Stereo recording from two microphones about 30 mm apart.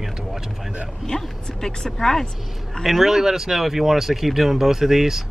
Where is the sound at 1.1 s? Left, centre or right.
Left.